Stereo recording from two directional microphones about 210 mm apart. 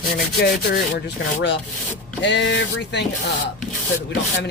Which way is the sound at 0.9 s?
55° left (ahead or behind).